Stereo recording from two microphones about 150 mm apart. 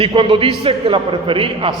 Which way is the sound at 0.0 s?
35° right (ahead or behind).